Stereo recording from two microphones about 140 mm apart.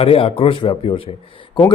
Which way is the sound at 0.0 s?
45° left (ahead or behind).